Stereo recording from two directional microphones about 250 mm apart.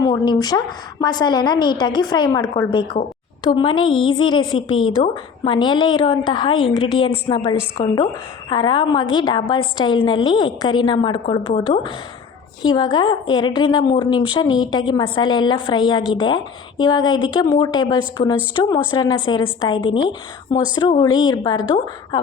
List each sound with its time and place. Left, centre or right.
0.0 s a woman's voice: centre